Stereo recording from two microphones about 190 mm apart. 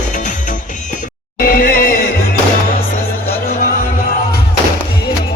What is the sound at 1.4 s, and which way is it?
Music, 50° left (ahead or behind).